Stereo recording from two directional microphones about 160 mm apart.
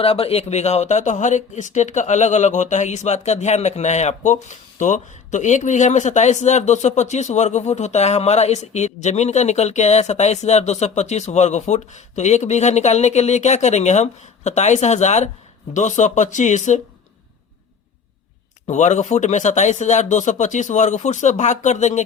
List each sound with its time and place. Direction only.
0.0 s speech: 35° left (ahead or behind)
18.7 s speech: 45° left (ahead or behind)